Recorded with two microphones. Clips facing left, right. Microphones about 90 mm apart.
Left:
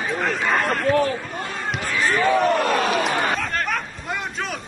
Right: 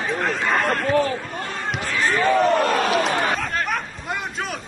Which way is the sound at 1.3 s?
5° left (ahead or behind).